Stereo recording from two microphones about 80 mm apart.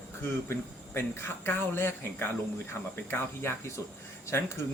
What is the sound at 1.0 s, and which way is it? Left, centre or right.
Speech, left.